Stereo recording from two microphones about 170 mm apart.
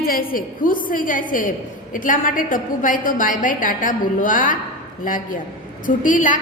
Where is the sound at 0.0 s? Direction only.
60° left (ahead or behind).